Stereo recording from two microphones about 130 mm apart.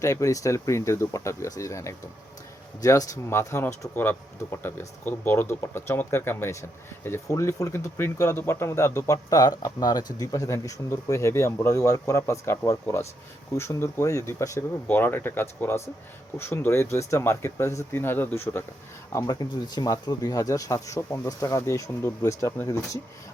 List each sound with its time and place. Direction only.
0.0 s speech: 25° left (ahead or behind)
19.1 s speech: 30° left (ahead or behind)